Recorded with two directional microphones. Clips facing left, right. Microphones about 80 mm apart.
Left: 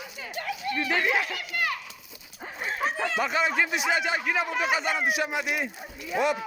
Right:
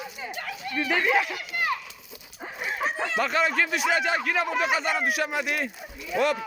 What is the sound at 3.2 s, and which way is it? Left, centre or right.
A man's voice, centre.